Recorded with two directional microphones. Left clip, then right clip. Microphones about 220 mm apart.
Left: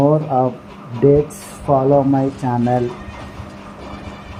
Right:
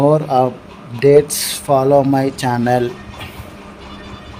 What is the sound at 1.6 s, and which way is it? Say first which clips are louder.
Speech: right 2 dB; 50° right (ahead or behind).